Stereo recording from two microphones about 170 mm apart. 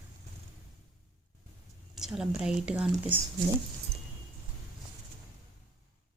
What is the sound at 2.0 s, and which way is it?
Speech, 5° right (ahead or behind).